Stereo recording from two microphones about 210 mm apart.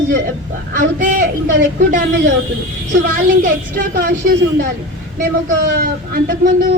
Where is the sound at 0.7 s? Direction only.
40° right (ahead or behind).